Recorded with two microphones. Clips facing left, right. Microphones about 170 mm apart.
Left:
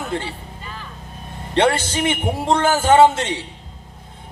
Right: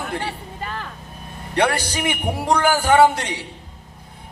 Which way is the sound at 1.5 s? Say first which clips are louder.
Left 3 dB; 25° left (ahead or behind).